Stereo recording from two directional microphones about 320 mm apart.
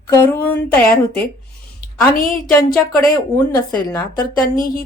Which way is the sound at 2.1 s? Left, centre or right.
Left.